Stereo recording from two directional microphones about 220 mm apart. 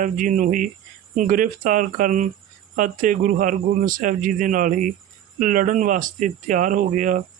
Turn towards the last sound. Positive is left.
turn(degrees=-35)  # may be behind; listen again after turning